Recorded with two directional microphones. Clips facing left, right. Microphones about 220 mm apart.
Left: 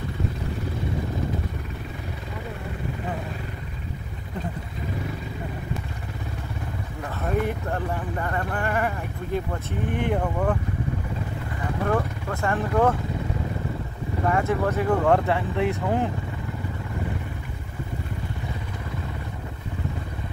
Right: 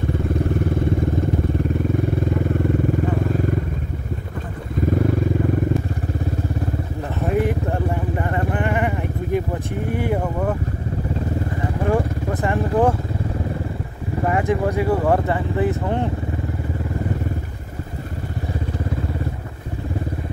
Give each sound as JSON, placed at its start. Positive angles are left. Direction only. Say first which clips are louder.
{"t": 7.7, "sound": "vehicle", "louder": "right 5 dB", "side_deg": -20}
{"t": 11.8, "sound": "vehicle", "louder": "right 4 dB", "side_deg": -20}
{"t": 14.3, "sound": "a sound", "louder": "right 4 dB", "side_deg": -15}